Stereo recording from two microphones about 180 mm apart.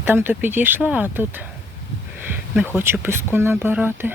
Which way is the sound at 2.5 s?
10° right (ahead or behind).